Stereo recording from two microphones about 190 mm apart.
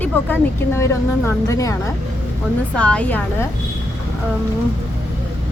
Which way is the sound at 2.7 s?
5° left (ahead or behind).